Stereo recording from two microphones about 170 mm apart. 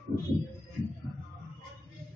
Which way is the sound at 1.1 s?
15° left (ahead or behind).